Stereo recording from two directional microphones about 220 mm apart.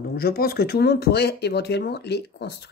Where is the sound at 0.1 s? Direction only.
45° left (ahead or behind).